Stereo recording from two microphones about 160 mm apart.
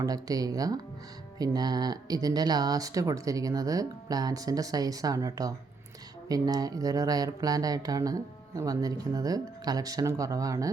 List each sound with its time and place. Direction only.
0.0 s speech: 20° right (ahead or behind)